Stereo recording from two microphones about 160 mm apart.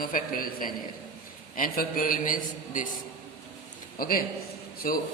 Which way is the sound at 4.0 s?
65° left (ahead or behind).